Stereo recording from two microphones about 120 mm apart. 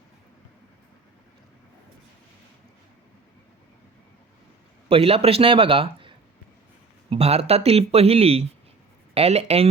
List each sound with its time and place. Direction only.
4.9 s a man's voice: 50° right (ahead or behind)